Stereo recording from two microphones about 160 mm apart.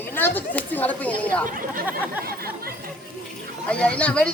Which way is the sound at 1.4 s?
60° right (ahead or behind).